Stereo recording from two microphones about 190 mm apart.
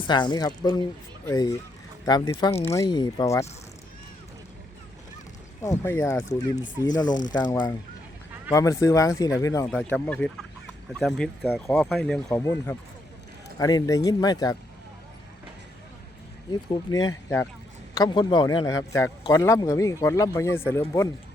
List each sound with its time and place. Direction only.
0.1 s speech: 25° left (ahead or behind)
5.6 s speech: 15° left (ahead or behind)
8.5 s speech: 15° left (ahead or behind); by 12.2 s centre (ahead or behind)
12.3 s speech: 15° left (ahead or behind)
16.5 s speech: 20° left (ahead or behind)